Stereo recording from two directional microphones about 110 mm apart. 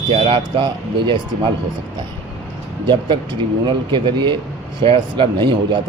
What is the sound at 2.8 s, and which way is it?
Speech, 45° right (ahead or behind).